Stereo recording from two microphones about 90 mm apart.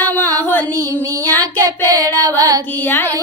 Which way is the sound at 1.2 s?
40° right (ahead or behind).